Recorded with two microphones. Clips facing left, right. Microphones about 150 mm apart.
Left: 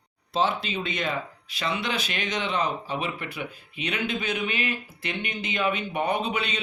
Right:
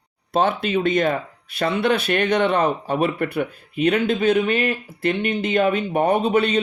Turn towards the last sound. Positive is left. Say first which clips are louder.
# right 9 dB
turn(degrees=-50)  # may be behind; listen again after turning